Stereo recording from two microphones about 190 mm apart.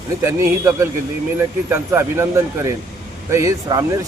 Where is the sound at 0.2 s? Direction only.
15° right (ahead or behind).